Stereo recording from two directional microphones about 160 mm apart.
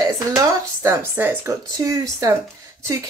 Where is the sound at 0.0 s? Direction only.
20° right (ahead or behind).